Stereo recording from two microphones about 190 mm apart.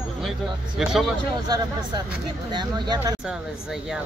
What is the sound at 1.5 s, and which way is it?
Speech, 25° right (ahead or behind).